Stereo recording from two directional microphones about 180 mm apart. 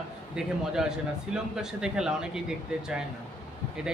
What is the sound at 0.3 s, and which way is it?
A man's voice, 5° right (ahead or behind).